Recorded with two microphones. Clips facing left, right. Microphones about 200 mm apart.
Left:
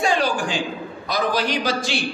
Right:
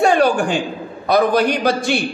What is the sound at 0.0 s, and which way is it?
A man's voice, 60° right (ahead or behind).